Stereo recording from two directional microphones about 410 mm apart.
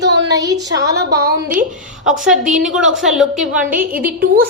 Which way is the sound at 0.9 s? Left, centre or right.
Right.